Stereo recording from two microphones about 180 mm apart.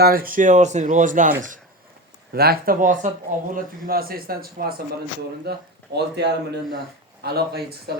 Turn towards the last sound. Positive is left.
turn(degrees=-60)  # may be behind; listen again after turning